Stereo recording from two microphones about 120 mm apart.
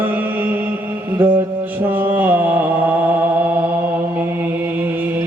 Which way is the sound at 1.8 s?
15° right (ahead or behind).